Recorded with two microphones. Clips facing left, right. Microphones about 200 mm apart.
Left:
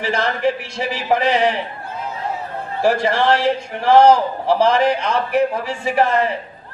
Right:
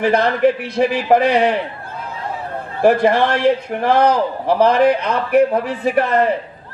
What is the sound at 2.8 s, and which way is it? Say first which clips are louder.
A man's voice: right 3 dB; 55° right (ahead or behind).